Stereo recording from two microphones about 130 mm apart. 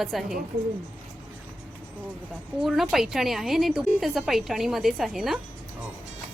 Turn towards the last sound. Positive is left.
turn(degrees=0)  # may be behind; listen again after turning